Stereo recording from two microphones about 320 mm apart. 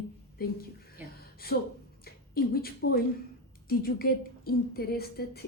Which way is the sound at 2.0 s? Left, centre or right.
Left.